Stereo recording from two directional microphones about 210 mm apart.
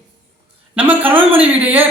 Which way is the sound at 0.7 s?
10° right (ahead or behind).